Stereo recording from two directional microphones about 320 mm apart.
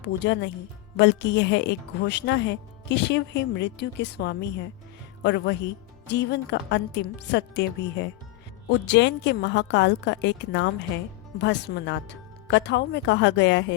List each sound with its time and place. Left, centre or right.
0.0 s a woman's voice: left